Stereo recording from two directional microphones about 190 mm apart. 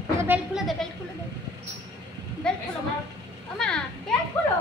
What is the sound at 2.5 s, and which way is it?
A child's voice, 5° left (ahead or behind).